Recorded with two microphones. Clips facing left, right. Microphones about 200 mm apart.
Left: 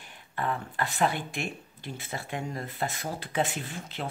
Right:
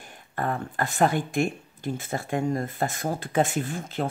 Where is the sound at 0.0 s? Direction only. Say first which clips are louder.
Right 3 dB; 45° right (ahead or behind).